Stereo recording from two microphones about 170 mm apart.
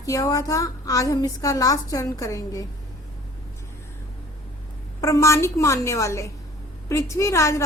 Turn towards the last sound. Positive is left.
turn(degrees=15)  # may be behind; listen again after turning